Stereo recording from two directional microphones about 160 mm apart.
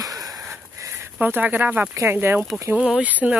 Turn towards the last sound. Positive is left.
turn(degrees=-10)  # may be behind; listen again after turning